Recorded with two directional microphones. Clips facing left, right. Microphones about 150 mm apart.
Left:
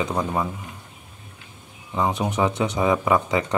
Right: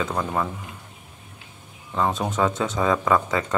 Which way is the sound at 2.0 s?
15° left (ahead or behind).